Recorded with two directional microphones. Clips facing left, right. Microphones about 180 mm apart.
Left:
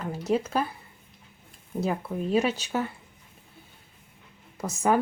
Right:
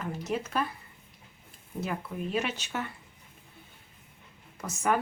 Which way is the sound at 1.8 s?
35° left (ahead or behind).